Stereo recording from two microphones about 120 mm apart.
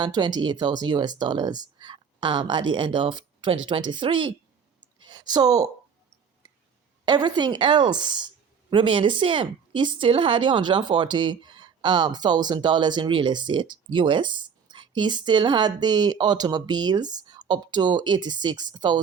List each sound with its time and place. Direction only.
0.0 s speech: 35° right (ahead or behind)
4.8 s a sound: 40° right (ahead or behind)
7.0 s speech: 35° right (ahead or behind)